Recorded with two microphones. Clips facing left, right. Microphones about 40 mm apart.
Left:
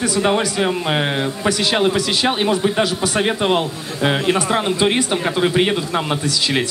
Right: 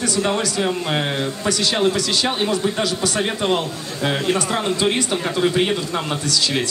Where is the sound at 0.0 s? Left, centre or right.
Left.